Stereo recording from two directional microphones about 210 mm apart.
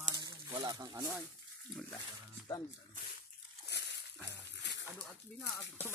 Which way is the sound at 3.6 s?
55° left (ahead or behind).